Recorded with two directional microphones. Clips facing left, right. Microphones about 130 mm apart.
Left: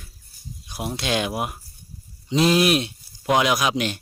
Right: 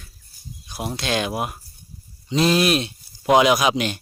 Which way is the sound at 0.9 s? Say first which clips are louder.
Even; 10° left (ahead or behind).